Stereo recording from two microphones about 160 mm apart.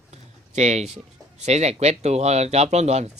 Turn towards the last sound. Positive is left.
turn(degrees=-45)  # may be behind; listen again after turning